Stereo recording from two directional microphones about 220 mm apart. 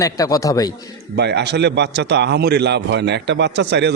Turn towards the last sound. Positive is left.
turn(degrees=-50)  # may be behind; listen again after turning